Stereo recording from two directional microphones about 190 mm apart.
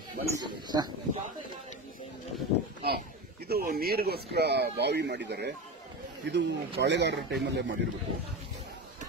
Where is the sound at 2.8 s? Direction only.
55° right (ahead or behind).